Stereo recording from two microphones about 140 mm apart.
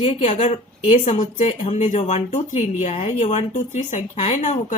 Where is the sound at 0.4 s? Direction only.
45° left (ahead or behind).